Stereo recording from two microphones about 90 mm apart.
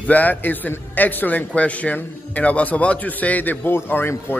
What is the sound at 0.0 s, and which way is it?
A man's voice, 20° left (ahead or behind).